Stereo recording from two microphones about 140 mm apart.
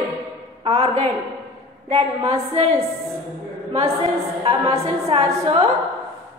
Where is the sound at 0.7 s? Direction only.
40° right (ahead or behind).